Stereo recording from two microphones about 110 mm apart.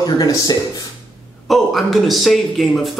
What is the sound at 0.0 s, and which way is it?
Speech, 35° left (ahead or behind).